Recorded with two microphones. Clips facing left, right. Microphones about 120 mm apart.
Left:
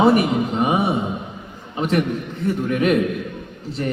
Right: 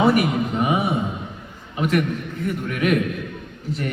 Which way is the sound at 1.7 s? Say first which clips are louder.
Left 1 dB; 35° left (ahead or behind).